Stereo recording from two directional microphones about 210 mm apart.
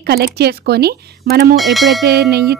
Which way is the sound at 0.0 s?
50° right (ahead or behind).